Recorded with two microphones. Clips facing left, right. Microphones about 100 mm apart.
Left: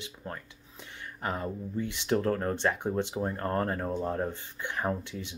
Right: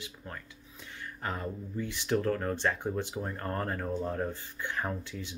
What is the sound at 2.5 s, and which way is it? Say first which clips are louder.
Speech: left 2 dB; 20° left (ahead or behind).